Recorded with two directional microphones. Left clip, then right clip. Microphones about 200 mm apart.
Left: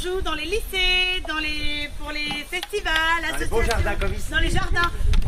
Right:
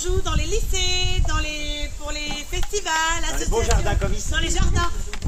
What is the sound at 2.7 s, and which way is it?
Speech, 10° left (ahead or behind).